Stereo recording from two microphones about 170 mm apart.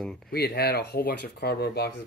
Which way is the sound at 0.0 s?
5° left (ahead or behind).